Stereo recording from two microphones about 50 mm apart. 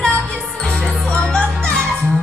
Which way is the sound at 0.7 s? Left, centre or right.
Centre.